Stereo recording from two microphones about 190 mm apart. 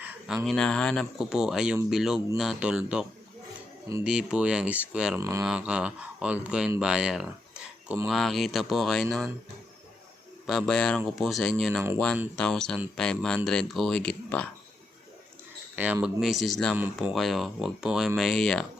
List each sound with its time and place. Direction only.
0.0 s a sound: 10° right (ahead or behind)
0.4 s speech: 5° left (ahead or behind)
10.4 s speech: centre (ahead or behind)
15.7 s speech: 10° right (ahead or behind)